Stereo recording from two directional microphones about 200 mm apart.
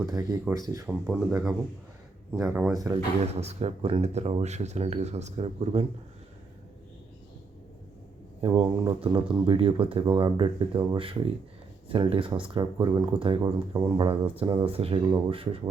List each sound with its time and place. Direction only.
0.1 s speech: 15° right (ahead or behind)
0.9 s speech: 5° right (ahead or behind)
1.3 s speech: 15° right (ahead or behind)
3.3 s speech: 30° right (ahead or behind)
8.4 s speech: 25° right (ahead or behind)